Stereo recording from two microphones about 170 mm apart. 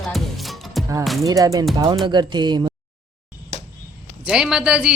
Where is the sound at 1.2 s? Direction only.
20° right (ahead or behind).